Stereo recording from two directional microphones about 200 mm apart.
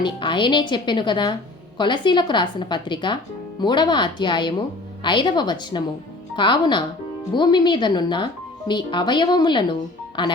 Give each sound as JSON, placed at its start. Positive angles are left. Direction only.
{"t": 0.0, "sound": "speech", "side_deg": 25}